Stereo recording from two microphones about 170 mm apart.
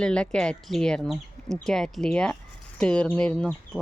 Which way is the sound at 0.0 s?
5° left (ahead or behind).